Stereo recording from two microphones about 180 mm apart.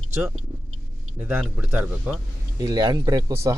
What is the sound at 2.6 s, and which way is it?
Speech, 20° right (ahead or behind).